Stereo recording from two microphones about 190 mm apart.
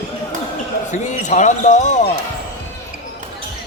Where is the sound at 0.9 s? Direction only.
40° left (ahead or behind).